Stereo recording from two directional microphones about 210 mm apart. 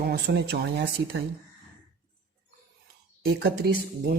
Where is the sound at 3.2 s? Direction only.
50° right (ahead or behind).